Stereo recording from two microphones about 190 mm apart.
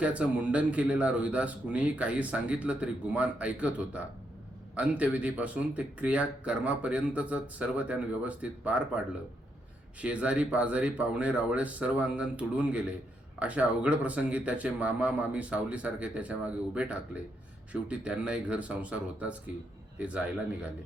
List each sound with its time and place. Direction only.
0.0 s speech: 5° right (ahead or behind)